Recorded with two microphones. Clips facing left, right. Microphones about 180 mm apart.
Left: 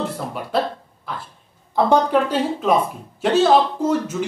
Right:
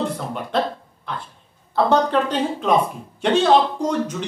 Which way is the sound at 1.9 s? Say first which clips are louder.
Left 2 dB; 10° left (ahead or behind).